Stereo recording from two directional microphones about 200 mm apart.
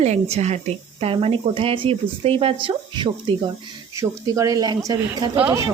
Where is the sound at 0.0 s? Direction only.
35° right (ahead or behind).